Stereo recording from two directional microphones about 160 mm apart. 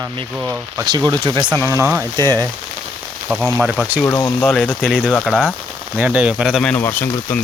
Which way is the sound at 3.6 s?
5° right (ahead or behind).